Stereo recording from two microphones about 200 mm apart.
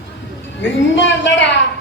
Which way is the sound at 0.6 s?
65° left (ahead or behind).